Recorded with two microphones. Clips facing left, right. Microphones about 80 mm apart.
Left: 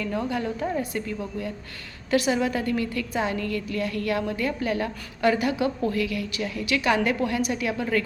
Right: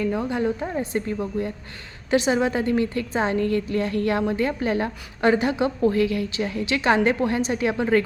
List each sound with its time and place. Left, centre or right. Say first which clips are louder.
0.0 s a woman's voice: right 4 dB; right
0.9 s a woman's voice: right 5 dB; right